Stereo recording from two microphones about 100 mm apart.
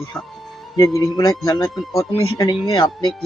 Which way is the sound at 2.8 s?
50° left (ahead or behind).